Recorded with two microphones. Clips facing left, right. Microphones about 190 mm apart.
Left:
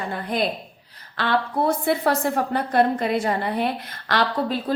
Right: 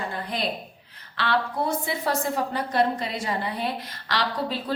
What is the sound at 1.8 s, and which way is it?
A woman's voice, 60° left (ahead or behind).